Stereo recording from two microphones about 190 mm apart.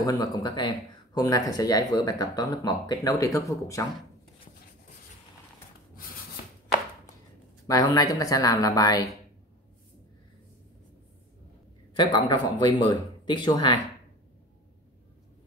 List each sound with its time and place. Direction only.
0.0 s speech: 20° left (ahead or behind)
7.6 s speech: 20° left (ahead or behind)
12.0 s speech: 25° left (ahead or behind)